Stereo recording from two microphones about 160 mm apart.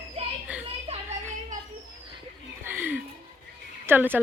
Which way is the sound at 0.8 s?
40° right (ahead or behind).